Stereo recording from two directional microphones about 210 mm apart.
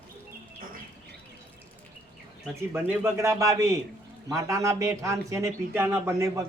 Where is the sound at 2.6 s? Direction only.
10° right (ahead or behind).